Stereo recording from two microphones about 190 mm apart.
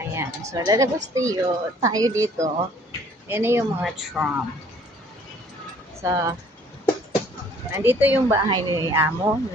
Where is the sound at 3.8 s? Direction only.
Centre (ahead or behind).